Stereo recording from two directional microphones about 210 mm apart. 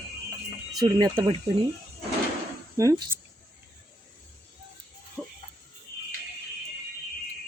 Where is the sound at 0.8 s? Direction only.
20° right (ahead or behind).